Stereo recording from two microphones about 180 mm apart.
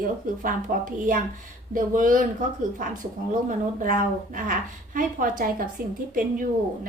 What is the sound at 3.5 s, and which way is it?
Speech, 50° right (ahead or behind).